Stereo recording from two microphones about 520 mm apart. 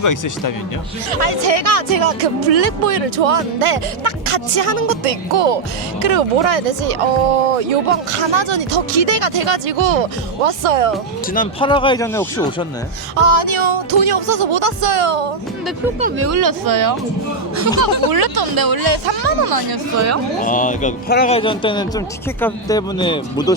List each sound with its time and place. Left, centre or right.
0.0 s speech: left
1.1 s speech: right
6.0 s speech: right
8.3 s speech: right
11.3 s a man's voice: centre
13.1 s speech: right
16.0 s speech: centre
16.4 s speech: right
20.4 s a man's voice: centre